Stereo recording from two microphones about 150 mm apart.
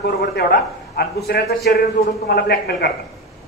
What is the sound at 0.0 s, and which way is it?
A man's voice, 90° left.